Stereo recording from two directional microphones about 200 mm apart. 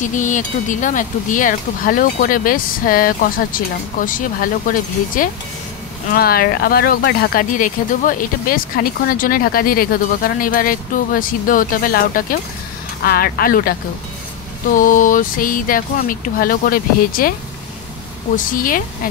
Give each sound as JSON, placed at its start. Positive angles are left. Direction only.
{"t": 0.0, "sound": "speech", "side_deg": 40}
{"t": 18.3, "sound": "speech", "side_deg": 40}